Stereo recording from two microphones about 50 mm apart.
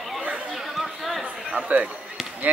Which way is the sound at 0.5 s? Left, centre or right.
Centre.